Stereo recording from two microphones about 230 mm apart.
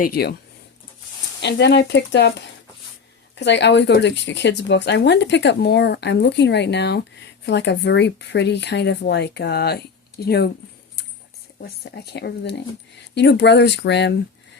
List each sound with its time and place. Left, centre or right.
0.0 s speech: left
1.4 s speech: left
3.3 s speech: left
11.6 s speech: left